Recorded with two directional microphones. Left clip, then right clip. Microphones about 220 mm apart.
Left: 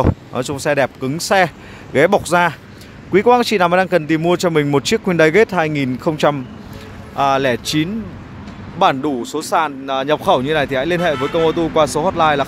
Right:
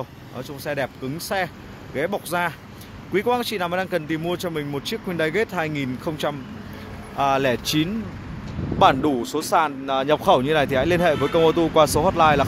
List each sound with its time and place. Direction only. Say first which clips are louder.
0.3 s speech: left 11 dB; 40° left (ahead or behind)
7.2 s speech: left 5 dB; 10° left (ahead or behind)